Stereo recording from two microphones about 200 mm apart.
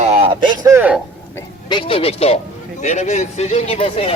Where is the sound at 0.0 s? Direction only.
30° right (ahead or behind); by 0.9 s 10° right (ahead or behind).